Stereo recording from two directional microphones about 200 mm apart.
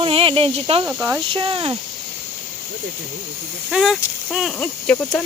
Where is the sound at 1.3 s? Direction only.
25° right (ahead or behind).